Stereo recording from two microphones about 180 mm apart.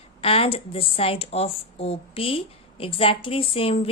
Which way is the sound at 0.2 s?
30° left (ahead or behind).